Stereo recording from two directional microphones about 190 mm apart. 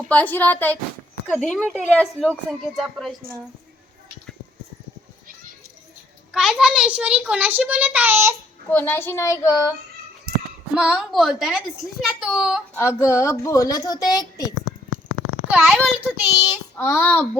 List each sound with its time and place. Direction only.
0.1 s a woman's voice: 10° left (ahead or behind)
6.3 s a child's voice: 5° right (ahead or behind)
8.7 s a woman's voice: 10° left (ahead or behind)
10.8 s a woman's voice: 5° right (ahead or behind)
12.7 s a woman's voice: 15° left (ahead or behind)
15.1 s babbling: 70° left (ahead or behind)
15.4 s a child's voice: 10° right (ahead or behind)
16.7 s a woman's voice: 10° left (ahead or behind)